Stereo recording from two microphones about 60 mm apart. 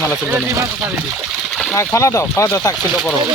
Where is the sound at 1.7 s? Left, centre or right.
Left.